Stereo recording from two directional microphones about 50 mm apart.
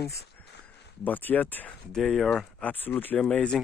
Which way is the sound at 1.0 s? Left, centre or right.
Left.